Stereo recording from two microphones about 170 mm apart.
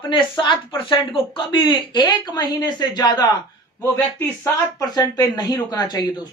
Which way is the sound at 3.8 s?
15° left (ahead or behind).